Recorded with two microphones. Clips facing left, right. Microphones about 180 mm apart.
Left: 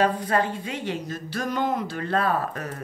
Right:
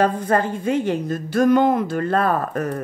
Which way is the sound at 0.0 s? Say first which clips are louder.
Right 4 dB; 50° right (ahead or behind).